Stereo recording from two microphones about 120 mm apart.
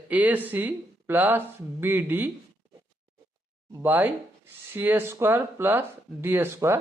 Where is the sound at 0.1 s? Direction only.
15° right (ahead or behind).